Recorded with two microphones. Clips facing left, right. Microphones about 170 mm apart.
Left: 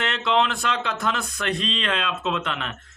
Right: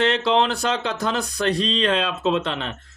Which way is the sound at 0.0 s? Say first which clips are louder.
Right 4 dB; 35° right (ahead or behind).